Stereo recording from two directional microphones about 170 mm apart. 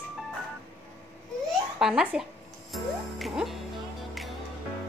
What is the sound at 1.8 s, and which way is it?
Speech, 5° right (ahead or behind).